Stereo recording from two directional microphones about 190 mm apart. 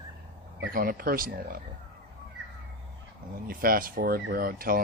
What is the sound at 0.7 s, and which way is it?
Speech, 50° right (ahead or behind).